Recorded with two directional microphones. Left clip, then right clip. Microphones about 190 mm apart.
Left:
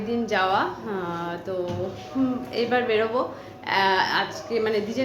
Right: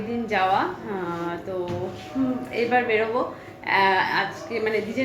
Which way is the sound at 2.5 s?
20° left (ahead or behind).